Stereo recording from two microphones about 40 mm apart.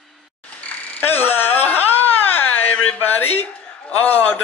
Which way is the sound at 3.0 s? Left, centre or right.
Left.